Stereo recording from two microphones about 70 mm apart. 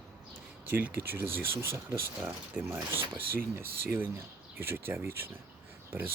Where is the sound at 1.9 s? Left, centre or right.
Right.